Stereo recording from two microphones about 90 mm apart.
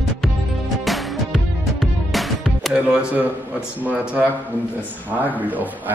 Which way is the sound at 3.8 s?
15° right (ahead or behind).